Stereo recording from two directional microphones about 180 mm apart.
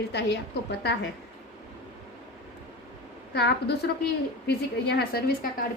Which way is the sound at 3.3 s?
65° left (ahead or behind).